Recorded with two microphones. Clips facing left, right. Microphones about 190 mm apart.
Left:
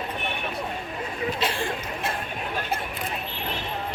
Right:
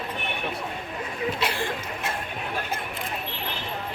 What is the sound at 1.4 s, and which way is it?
Speech, 30° left (ahead or behind).